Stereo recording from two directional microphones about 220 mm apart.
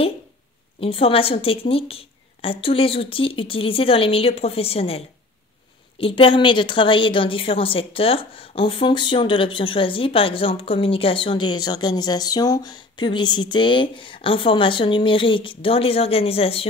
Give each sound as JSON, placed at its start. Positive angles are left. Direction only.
{"t": 0.7, "sound": "a woman's voice", "side_deg": 25}